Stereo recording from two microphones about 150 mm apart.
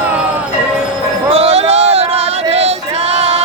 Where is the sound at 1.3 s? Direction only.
45° right (ahead or behind).